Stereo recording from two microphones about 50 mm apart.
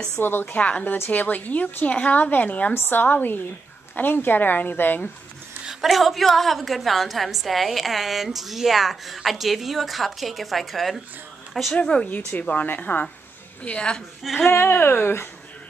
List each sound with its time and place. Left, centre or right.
0.2 s speech: left
0.6 s a woman's voice: left
2.7 s a woman's voice: left
5.7 s a woman's voice: centre
11.7 s speech: centre
12.3 s a woman's voice: left
13.7 s speech: centre
14.3 s speech: left